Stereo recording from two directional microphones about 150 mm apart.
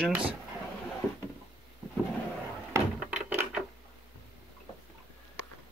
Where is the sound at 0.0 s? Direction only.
10° right (ahead or behind).